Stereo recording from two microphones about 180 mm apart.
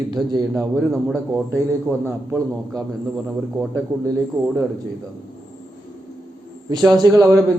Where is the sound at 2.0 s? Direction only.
10° right (ahead or behind).